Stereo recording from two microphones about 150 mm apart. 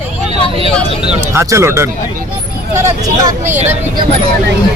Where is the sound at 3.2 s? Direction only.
15° right (ahead or behind).